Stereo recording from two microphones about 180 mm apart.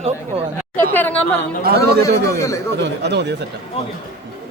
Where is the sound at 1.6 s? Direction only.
60° right (ahead or behind).